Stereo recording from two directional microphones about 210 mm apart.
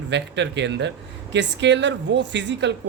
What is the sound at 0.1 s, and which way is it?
Speech, 55° right (ahead or behind).